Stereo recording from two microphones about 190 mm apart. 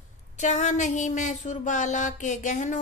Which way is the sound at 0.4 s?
40° left (ahead or behind).